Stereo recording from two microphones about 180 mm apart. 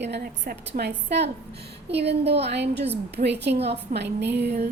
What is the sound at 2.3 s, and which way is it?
A woman's voice, 70° right (ahead or behind).